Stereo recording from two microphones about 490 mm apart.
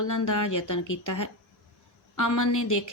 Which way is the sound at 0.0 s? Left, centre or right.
Left.